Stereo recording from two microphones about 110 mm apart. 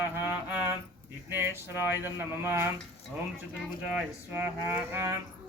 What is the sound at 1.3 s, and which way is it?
Speech, 20° right (ahead or behind).